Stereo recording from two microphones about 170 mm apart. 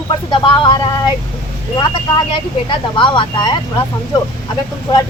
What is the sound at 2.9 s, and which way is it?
Speech, 30° left (ahead or behind).